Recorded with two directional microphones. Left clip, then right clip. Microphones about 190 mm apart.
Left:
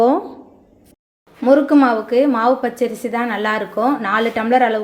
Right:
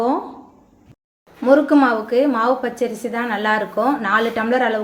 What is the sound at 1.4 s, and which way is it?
A woman's voice, 10° left (ahead or behind).